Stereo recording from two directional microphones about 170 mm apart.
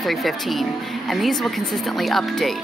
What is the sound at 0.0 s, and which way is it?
Speech, centre (ahead or behind).